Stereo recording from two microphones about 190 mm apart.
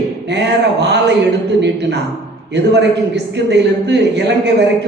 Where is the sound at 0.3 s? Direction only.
65° right (ahead or behind).